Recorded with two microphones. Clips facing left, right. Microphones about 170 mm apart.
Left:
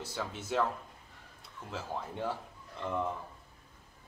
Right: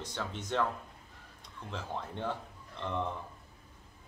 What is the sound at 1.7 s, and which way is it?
Speech, 5° left (ahead or behind).